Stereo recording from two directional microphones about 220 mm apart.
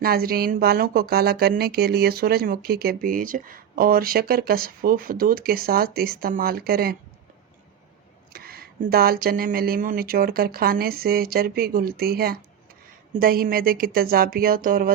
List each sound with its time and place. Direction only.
0.0 s speech: 45° right (ahead or behind)
8.3 s speech: 45° right (ahead or behind)